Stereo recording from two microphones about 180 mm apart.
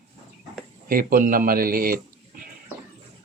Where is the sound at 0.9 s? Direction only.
50° right (ahead or behind).